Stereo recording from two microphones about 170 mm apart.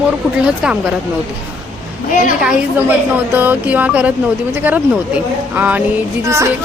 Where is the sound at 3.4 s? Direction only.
10° right (ahead or behind).